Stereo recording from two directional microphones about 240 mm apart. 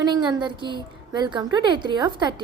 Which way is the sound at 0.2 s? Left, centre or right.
Centre.